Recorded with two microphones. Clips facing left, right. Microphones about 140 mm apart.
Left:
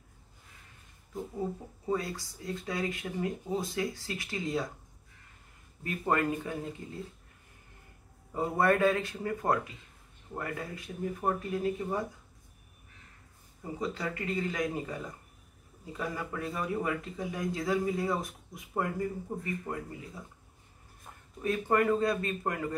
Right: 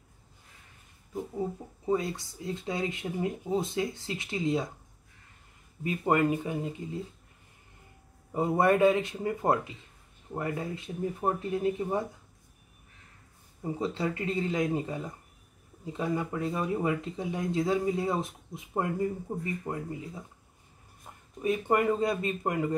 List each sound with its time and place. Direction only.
1.9 s speech: 20° right (ahead or behind)
5.9 s speech: 20° right (ahead or behind)
8.3 s speech: 20° right (ahead or behind)
13.6 s speech: 25° right (ahead or behind)
21.4 s speech: 20° right (ahead or behind)